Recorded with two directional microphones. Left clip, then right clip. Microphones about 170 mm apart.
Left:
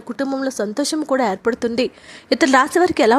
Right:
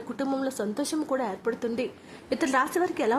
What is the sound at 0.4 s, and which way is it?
A woman's voice, 35° left (ahead or behind).